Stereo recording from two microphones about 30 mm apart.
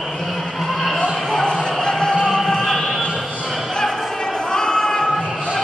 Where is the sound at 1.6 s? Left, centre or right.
Left.